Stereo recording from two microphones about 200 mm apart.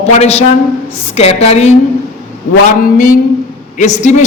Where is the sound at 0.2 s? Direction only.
35° left (ahead or behind).